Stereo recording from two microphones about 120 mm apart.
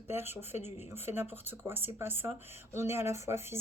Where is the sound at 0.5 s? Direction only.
65° left (ahead or behind).